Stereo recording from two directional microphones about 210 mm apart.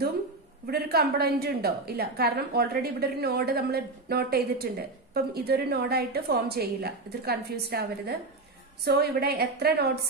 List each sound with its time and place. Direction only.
0.7 s a woman's voice: 50° right (ahead or behind)